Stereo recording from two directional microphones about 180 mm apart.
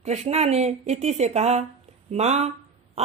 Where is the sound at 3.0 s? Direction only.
35° right (ahead or behind).